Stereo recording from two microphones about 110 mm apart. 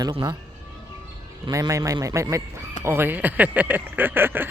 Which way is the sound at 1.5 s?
30° right (ahead or behind).